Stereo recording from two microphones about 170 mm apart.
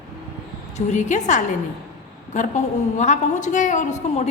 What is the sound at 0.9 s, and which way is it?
A woman's voice, 45° left (ahead or behind).